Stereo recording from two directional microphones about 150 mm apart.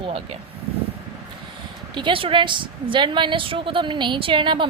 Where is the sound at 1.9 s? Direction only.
30° right (ahead or behind).